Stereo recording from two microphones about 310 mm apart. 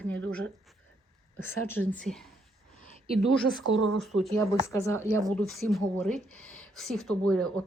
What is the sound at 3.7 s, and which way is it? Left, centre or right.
Speech, right.